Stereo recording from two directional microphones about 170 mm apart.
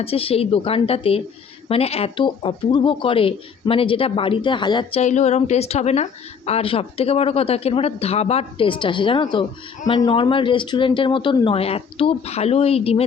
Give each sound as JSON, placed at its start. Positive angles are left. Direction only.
{"t": 0.0, "sound": "a woman's voice", "side_deg": 35}
{"t": 4.9, "sound": "a woman's voice", "side_deg": 40}